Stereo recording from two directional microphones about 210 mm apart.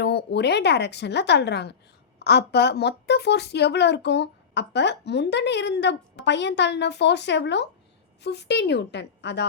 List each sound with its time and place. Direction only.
0.0 s a woman's voice: 50° left (ahead or behind)